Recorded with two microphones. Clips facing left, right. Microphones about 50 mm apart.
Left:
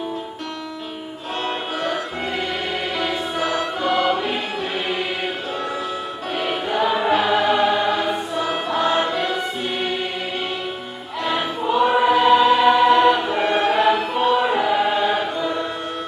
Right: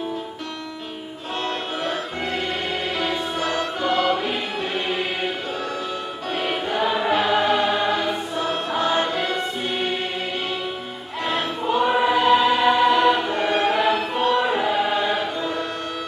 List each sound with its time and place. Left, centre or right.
1.8 s music: centre
6.3 s music: centre
11.2 s choir: centre